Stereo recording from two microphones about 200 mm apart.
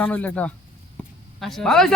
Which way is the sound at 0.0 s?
10° left (ahead or behind).